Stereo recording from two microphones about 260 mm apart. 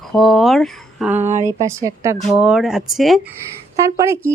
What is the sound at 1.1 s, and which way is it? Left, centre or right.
Speech, right.